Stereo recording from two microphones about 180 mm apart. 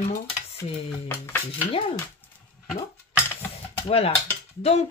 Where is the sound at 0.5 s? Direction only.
15° left (ahead or behind).